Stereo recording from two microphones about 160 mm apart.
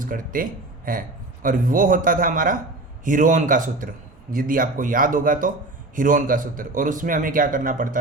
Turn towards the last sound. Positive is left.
turn(degrees=-60)  # may be behind; listen again after turning